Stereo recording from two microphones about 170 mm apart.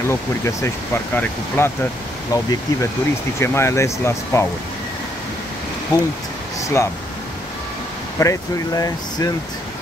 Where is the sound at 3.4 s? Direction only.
15° left (ahead or behind).